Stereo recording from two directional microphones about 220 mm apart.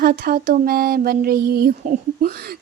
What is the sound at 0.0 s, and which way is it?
A woman's voice, 40° right (ahead or behind).